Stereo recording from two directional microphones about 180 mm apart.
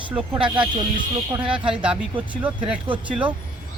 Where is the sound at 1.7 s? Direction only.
5° right (ahead or behind).